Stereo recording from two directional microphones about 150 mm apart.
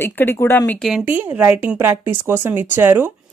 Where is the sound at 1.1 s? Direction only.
10° right (ahead or behind).